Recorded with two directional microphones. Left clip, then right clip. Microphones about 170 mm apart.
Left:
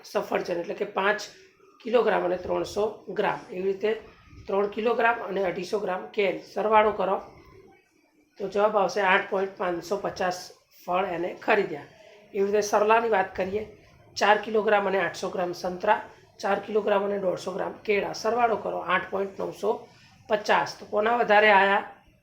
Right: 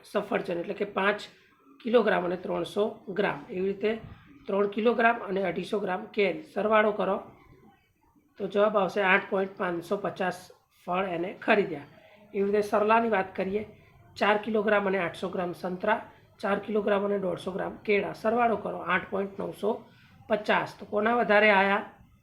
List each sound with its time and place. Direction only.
0.1 s speech: 35° right (ahead or behind)
8.4 s speech: 35° right (ahead or behind)